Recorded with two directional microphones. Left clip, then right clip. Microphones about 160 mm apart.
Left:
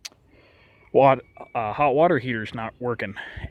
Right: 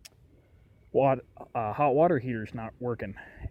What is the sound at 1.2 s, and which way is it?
A man's voice, 10° left (ahead or behind).